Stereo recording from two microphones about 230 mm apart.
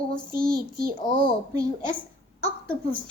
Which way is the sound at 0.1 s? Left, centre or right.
Right.